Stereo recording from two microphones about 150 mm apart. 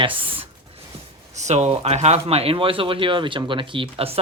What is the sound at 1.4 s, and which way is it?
Speech, 50° right (ahead or behind).